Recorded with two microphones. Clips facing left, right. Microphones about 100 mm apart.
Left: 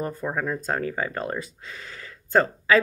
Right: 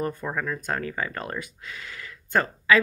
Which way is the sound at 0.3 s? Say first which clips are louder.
Left 2 dB; 30° left (ahead or behind).